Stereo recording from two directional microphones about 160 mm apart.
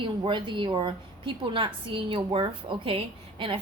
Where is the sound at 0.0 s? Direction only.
30° right (ahead or behind).